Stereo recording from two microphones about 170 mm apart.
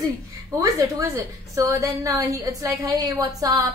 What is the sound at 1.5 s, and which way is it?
A woman's voice, 20° right (ahead or behind).